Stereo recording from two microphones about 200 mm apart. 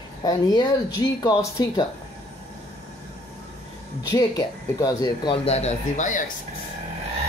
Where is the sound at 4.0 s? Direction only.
20° left (ahead or behind); by 6.2 s 40° left (ahead or behind).